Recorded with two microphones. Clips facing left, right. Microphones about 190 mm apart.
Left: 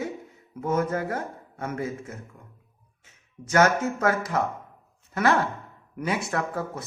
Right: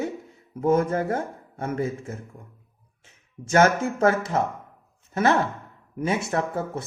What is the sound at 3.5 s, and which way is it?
A man's voice, 25° right (ahead or behind).